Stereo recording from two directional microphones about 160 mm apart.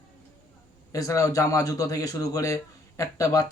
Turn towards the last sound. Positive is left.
turn(degrees=20)  # may be behind; listen again after turning